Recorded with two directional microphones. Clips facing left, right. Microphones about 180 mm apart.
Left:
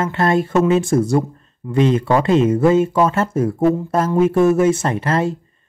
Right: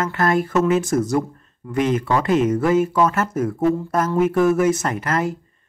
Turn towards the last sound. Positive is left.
turn(degrees=30)  # may be behind; listen again after turning